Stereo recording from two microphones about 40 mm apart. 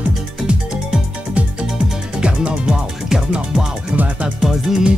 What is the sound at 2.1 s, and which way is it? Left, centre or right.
Music, right.